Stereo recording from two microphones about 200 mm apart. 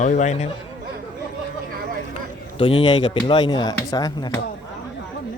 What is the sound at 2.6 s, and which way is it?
Speech, 25° left (ahead or behind).